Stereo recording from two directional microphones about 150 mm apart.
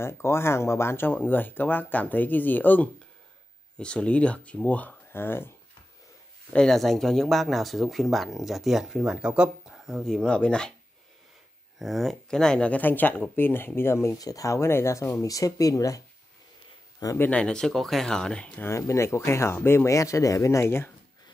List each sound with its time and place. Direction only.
0.0 s speech: 15° left (ahead or behind)
6.5 s speech: 5° left (ahead or behind)
11.8 s speech: centre (ahead or behind); by 16.0 s 20° left (ahead or behind)
17.0 s speech: 20° left (ahead or behind)
17.3 s speech: 5° left (ahead or behind)